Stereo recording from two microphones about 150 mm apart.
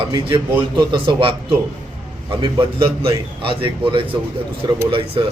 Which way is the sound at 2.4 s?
35° right (ahead or behind).